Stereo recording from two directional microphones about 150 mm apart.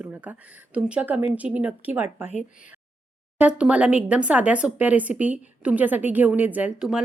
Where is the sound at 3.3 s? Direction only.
10° right (ahead or behind).